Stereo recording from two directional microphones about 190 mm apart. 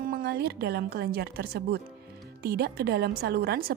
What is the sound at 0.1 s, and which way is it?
A woman's voice, 55° right (ahead or behind).